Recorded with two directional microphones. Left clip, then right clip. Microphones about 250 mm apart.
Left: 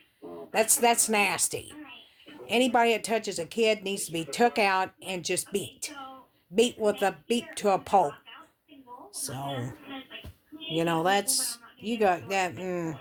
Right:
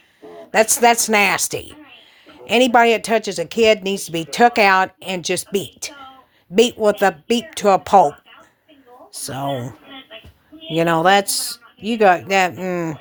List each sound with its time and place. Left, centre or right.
0.5 s speech: right
9.1 s speech: right
10.8 s speech: right